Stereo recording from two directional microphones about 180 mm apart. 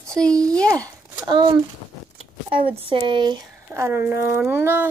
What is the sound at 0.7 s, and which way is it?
A child's voice, 20° right (ahead or behind).